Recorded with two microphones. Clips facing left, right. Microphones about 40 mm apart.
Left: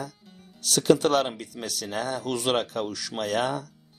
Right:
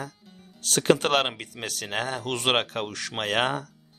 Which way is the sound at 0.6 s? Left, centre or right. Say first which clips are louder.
Left 1 dB; right.